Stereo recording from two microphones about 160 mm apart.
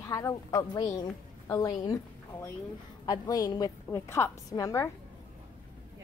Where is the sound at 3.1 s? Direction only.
25° left (ahead or behind).